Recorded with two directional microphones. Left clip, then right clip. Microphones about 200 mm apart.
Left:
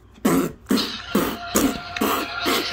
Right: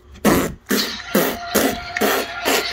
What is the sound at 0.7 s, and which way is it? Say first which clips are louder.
Music: right 3 dB; 15° right (ahead or behind).